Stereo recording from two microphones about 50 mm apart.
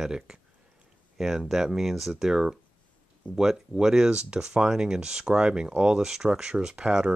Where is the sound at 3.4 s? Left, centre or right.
Centre.